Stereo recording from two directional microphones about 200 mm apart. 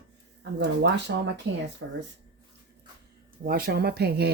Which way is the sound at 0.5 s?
60° right (ahead or behind).